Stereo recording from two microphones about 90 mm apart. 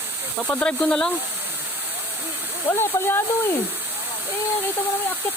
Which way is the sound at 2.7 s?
25° left (ahead or behind).